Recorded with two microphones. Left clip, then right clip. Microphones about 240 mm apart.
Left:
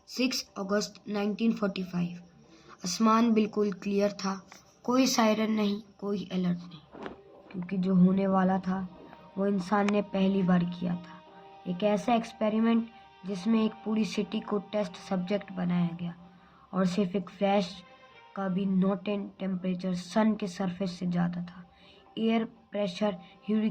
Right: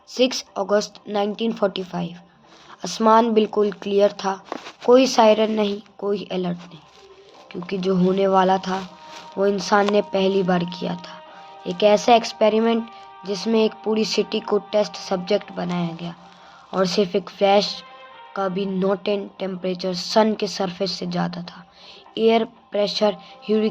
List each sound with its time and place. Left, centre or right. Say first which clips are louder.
0.1 s speech: right 11 dB; centre
7.7 s a woman's voice: right 9 dB; centre